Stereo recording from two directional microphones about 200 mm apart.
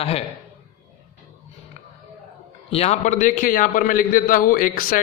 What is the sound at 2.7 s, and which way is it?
A man's voice, 30° left (ahead or behind).